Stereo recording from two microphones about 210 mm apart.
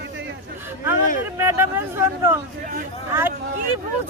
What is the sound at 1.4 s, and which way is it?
Speech, 10° right (ahead or behind).